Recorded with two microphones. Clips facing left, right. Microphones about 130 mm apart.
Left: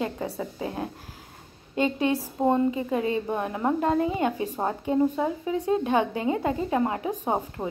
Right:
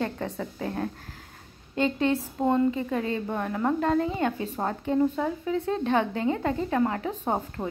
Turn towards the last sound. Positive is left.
turn(degrees=15)  # may be behind; listen again after turning